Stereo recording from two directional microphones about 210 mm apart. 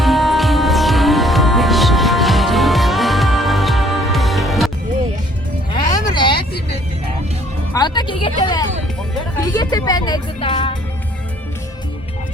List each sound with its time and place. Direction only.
0.0 s music: centre (ahead or behind)
5.9 s a sound: 20° left (ahead or behind)
7.7 s music: 20° left (ahead or behind)